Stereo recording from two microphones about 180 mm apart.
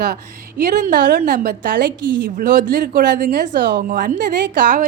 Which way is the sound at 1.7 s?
75° right (ahead or behind).